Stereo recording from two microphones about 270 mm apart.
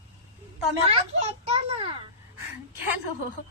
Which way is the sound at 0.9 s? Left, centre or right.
Right.